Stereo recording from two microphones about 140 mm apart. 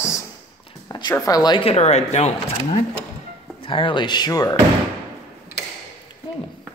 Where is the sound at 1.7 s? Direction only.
50° left (ahead or behind).